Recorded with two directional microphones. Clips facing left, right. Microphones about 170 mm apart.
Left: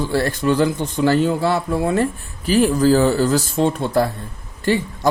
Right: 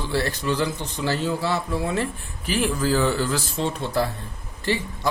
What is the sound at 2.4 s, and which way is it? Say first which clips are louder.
A man's voice: left 8 dB; 40° left (ahead or behind).